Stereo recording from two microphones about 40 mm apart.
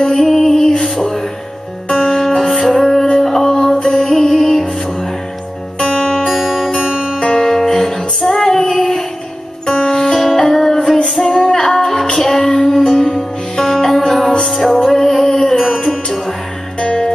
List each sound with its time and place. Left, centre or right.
0.0 s music: centre
5.8 s music: left
6.2 s music: centre
6.8 s music: centre
7.2 s music: left
7.4 s music: centre